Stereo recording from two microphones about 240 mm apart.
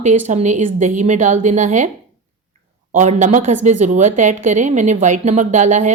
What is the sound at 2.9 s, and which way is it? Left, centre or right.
A woman's voice, right.